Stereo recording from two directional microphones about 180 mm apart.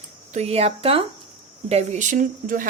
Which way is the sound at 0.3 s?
35° right (ahead or behind).